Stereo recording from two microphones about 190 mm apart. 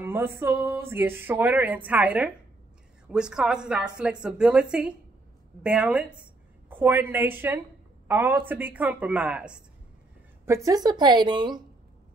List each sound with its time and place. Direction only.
0.0 s a woman's voice: 10° right (ahead or behind)
10.4 s a woman's voice: 15° right (ahead or behind)